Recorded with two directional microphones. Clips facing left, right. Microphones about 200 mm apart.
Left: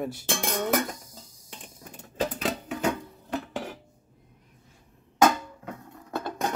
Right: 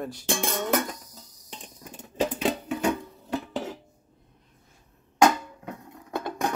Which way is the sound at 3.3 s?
15° right (ahead or behind).